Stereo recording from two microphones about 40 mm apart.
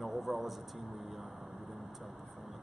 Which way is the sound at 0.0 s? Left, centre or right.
Centre.